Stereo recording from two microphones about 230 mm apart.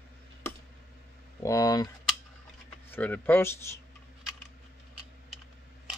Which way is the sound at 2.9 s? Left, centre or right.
Centre.